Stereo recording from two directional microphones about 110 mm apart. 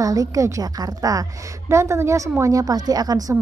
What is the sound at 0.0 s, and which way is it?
A woman's voice, 30° right (ahead or behind).